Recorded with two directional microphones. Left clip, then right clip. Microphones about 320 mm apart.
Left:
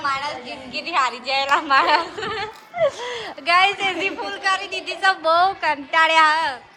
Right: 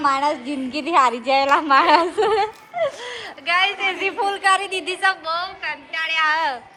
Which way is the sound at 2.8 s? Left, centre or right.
Centre.